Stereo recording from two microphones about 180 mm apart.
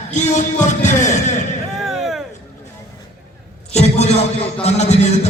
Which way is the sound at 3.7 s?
35° left (ahead or behind).